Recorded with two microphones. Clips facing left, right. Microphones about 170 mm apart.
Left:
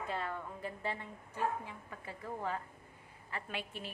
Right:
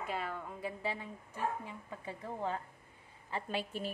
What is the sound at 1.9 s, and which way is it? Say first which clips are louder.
Speech: right 1 dB; 20° right (ahead or behind).